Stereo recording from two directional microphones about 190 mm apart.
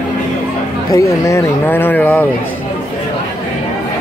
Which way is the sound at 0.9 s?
15° left (ahead or behind).